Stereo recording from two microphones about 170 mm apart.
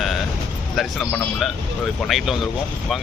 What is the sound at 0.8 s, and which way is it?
Speech, centre (ahead or behind).